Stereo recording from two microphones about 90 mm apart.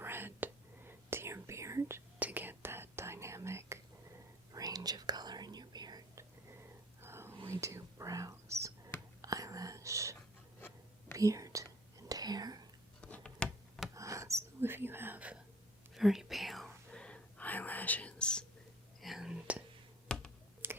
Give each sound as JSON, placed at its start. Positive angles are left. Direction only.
{"t": 0.0, "sound": "whispering", "side_deg": -25}
{"t": 2.1, "sound": "whispering", "side_deg": -20}
{"t": 4.5, "sound": "whispering", "side_deg": -45}
{"t": 6.1, "sound": "whispering", "side_deg": -30}
{"t": 13.0, "sound": "a sound", "side_deg": 15}
{"t": 13.9, "sound": "whispering", "side_deg": -35}
{"t": 16.0, "sound": "whispering", "side_deg": -5}
{"t": 19.0, "sound": "whispering", "side_deg": -5}
{"t": 20.1, "sound": "finger snapping", "side_deg": 10}
{"t": 20.6, "sound": "finger snapping", "side_deg": -25}